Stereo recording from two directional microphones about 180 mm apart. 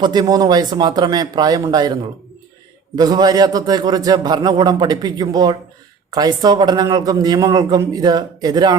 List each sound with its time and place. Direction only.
0.0 s a man's voice: 20° right (ahead or behind)